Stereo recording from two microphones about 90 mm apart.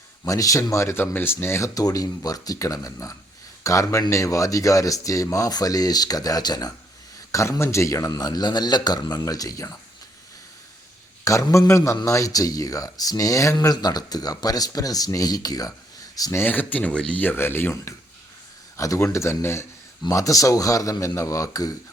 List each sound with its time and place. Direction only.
0.3 s speech: 40° left (ahead or behind)
7.3 s speech: 35° left (ahead or behind)
11.3 s speech: 35° left (ahead or behind)
16.4 s speech: 20° left (ahead or behind)
18.8 s speech: 35° left (ahead or behind)